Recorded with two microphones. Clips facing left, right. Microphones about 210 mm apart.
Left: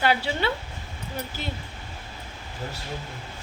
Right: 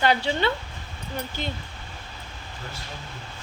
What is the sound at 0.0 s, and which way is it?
Speech, 5° left (ahead or behind).